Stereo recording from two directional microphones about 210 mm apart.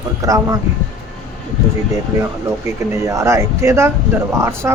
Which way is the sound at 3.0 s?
15° right (ahead or behind).